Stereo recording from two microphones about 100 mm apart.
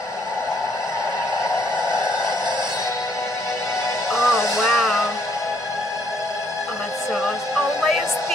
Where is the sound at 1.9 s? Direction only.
50° right (ahead or behind).